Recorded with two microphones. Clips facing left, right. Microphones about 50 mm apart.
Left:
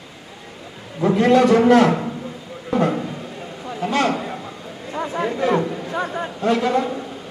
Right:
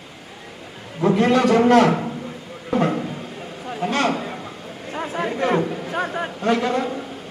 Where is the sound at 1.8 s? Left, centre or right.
Centre.